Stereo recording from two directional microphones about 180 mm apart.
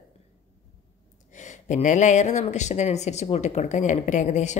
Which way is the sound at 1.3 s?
40° left (ahead or behind).